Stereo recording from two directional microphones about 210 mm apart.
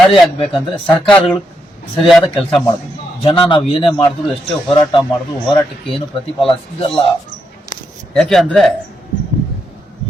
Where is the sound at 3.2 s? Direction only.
25° left (ahead or behind).